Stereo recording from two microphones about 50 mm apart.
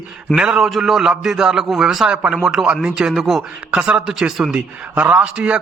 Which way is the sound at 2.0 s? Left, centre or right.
Centre.